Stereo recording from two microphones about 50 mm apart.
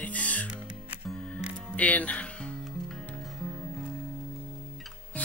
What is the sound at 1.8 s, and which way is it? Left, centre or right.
Speech, left.